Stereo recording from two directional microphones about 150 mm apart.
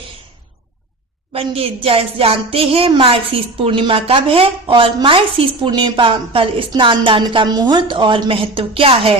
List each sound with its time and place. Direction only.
1.3 s speech: 40° right (ahead or behind)